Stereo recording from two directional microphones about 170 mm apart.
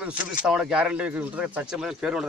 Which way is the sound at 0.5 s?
5° right (ahead or behind).